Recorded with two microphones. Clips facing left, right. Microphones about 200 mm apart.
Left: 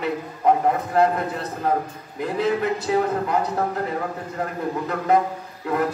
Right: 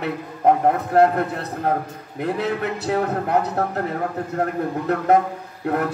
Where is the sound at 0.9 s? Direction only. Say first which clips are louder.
Right 5 dB; 60° right (ahead or behind).